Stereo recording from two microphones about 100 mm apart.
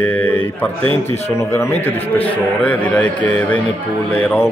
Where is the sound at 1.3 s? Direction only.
30° left (ahead or behind).